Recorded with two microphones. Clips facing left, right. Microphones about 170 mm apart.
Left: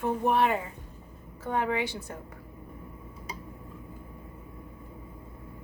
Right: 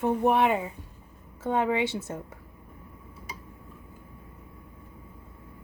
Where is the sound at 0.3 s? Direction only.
20° right (ahead or behind).